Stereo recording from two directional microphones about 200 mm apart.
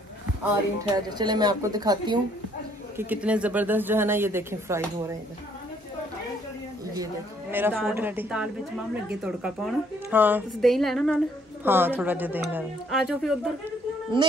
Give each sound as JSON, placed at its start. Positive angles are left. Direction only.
{"t": 0.9, "sound": "a woman's voice", "side_deg": -20}
{"t": 3.0, "sound": "speech", "side_deg": -5}
{"t": 7.5, "sound": "speech", "side_deg": -10}
{"t": 11.6, "sound": "speech", "side_deg": -10}
{"t": 14.2, "sound": "a woman's voice", "side_deg": -25}